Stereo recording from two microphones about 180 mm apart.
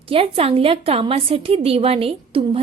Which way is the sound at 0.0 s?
30° right (ahead or behind).